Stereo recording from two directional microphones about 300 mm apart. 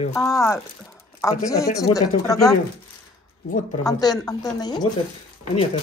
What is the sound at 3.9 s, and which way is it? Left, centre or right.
Speech, centre.